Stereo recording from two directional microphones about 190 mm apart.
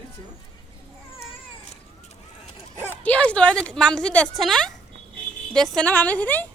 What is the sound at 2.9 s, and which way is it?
A woman's voice, 5° left (ahead or behind).